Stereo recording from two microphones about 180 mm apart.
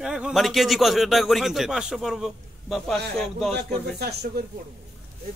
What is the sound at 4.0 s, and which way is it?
Speech, 65° right (ahead or behind).